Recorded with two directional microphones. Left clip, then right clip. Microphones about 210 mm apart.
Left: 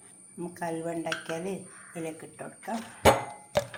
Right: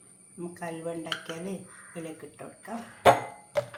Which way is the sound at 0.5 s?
25° left (ahead or behind).